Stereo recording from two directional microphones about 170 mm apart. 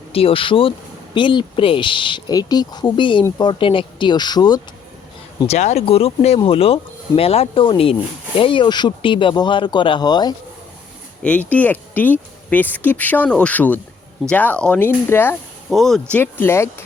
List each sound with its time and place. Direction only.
0.1 s speech: 35° left (ahead or behind)
5.5 s speech: 40° left (ahead or behind); by 10.3 s 25° left (ahead or behind)
11.2 s speech: 10° left (ahead or behind)
15.7 s speech: centre (ahead or behind)
16.2 s speech: 15° left (ahead or behind)